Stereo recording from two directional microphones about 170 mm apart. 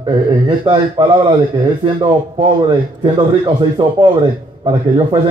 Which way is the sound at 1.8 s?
30° right (ahead or behind).